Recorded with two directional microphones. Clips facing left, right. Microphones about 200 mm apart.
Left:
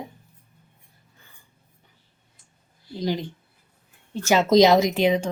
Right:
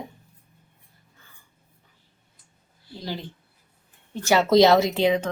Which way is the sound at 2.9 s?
15° left (ahead or behind).